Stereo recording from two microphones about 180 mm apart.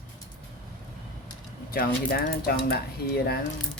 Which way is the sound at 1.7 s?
55° left (ahead or behind).